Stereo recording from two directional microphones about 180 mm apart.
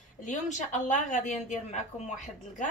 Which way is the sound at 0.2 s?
40° left (ahead or behind).